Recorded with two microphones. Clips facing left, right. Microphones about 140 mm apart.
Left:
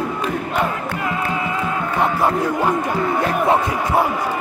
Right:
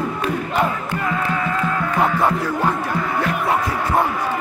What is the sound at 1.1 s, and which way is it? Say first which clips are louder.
Music: right 1 dB; 15° left (ahead or behind).